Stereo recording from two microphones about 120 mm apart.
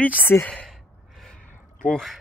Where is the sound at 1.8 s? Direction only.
5° left (ahead or behind).